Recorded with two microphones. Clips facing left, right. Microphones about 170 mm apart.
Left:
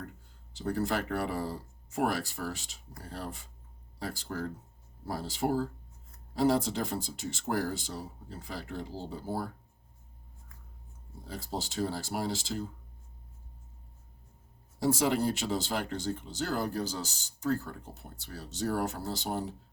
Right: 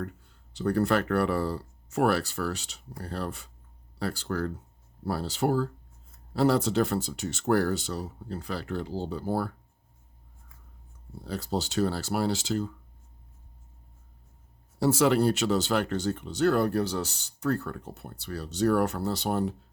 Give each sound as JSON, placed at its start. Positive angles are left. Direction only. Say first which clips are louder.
{"t": 0.5, "sound": "speech", "louder": "right 6 dB", "side_deg": -65}
{"t": 11.3, "sound": "speech", "louder": "right 7 dB", "side_deg": -75}
{"t": 14.8, "sound": "speech", "louder": "right 5 dB", "side_deg": -70}